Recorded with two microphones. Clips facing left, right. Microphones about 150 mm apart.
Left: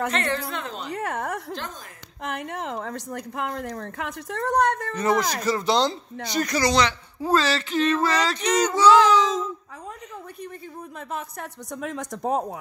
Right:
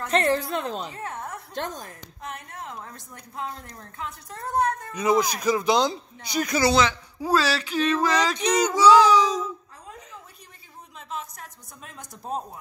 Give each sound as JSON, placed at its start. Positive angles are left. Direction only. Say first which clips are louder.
{"t": 0.1, "sound": "a woman's voice", "louder": "right 4 dB", "side_deg": -35}
{"t": 0.9, "sound": "speech", "louder": "left 6 dB", "side_deg": 85}
{"t": 4.9, "sound": "speech", "louder": "even", "side_deg": -15}
{"t": 11.0, "sound": "speech", "louder": "left 2 dB", "side_deg": 55}